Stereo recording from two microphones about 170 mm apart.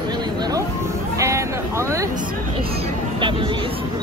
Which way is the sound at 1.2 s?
15° right (ahead or behind).